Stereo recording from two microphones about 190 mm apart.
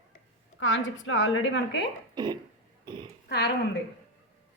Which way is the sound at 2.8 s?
25° right (ahead or behind).